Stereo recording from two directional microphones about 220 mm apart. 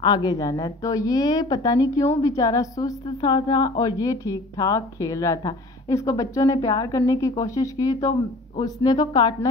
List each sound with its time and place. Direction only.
0.0 s speech: 20° left (ahead or behind)